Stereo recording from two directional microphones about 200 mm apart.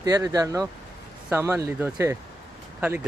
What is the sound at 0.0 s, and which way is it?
Speech, 20° right (ahead or behind).